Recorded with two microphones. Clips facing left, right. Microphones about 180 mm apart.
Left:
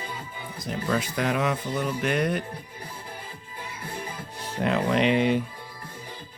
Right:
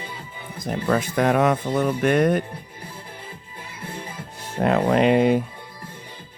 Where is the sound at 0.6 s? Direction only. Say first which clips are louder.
Right 5 dB; 50° right (ahead or behind).